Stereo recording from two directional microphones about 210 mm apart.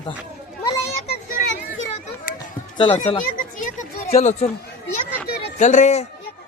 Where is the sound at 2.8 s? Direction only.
35° left (ahead or behind).